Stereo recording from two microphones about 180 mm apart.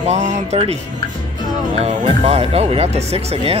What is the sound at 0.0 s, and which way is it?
Speech, 40° right (ahead or behind).